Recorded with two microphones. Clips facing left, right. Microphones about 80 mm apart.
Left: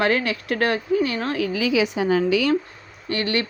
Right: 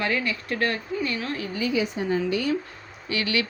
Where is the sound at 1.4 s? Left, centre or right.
Left.